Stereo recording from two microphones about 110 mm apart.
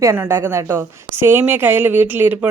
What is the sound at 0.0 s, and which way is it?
A woman's voice, 20° right (ahead or behind).